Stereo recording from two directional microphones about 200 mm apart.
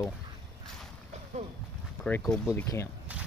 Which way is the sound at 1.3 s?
35° right (ahead or behind).